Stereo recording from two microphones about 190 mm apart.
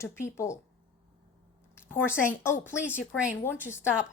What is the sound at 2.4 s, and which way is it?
A woman's voice, 10° left (ahead or behind).